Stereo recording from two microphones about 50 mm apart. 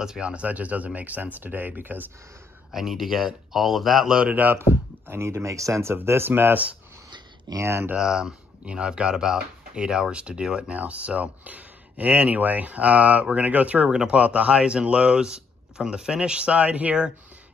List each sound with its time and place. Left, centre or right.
0.0 s speech: centre
0.3 s speech: right
2.7 s speech: centre
4.2 s speech: right
4.6 s speech: right
6.0 s speech: right
7.5 s speech: right
8.0 s speech: centre; by 13.8 s right
13.8 s speech: centre